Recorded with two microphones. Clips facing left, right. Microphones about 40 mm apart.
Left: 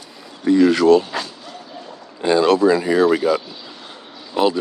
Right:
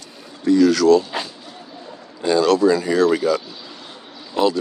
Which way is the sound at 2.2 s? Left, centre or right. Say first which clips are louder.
Left 1 dB; left.